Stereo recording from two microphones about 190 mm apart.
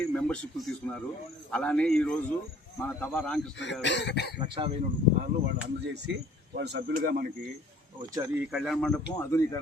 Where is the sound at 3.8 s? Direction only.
65° left (ahead or behind).